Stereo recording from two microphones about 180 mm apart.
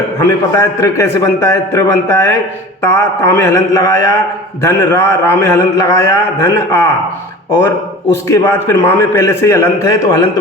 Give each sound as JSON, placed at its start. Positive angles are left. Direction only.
{"t": 0.2, "sound": "a man's voice", "side_deg": 15}
{"t": 8.1, "sound": "a man's voice", "side_deg": 15}